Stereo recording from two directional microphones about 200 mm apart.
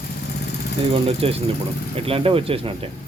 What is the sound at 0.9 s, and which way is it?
Speech, 30° right (ahead or behind).